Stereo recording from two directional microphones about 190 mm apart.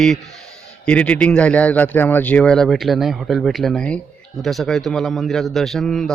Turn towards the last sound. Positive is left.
turn(degrees=0)  # may be behind; listen again after turning